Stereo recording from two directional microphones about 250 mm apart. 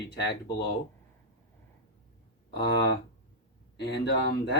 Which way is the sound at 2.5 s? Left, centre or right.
Left.